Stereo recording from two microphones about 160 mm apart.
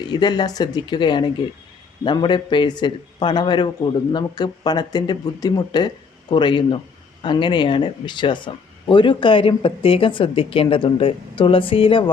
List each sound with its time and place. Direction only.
0.1 s a man's voice: 25° left (ahead or behind)